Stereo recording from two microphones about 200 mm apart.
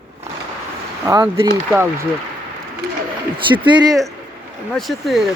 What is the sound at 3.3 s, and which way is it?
Speech, 25° right (ahead or behind).